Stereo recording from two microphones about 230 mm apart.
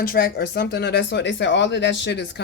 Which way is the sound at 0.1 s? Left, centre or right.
Left.